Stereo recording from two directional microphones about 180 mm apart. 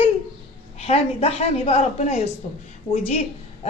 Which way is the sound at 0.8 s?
35° left (ahead or behind).